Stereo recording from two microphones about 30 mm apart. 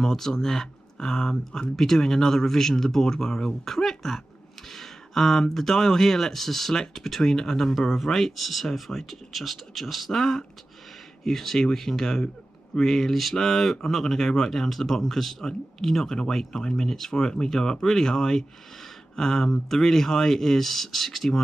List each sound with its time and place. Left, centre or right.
0.0 s speech: centre